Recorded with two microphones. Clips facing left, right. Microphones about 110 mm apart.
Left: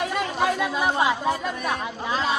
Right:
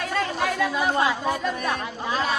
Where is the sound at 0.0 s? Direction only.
20° left (ahead or behind).